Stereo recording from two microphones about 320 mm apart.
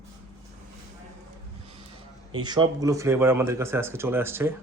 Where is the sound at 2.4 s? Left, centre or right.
Centre.